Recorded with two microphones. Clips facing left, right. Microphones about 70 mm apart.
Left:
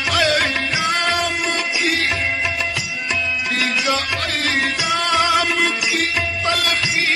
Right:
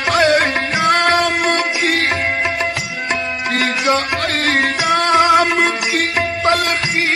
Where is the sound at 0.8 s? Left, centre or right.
Right.